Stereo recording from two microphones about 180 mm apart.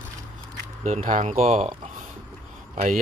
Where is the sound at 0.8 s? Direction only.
45° right (ahead or behind).